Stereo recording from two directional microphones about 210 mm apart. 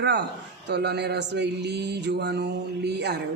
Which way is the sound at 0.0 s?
55° right (ahead or behind).